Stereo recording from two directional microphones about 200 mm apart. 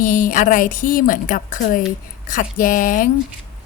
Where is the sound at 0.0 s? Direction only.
45° left (ahead or behind).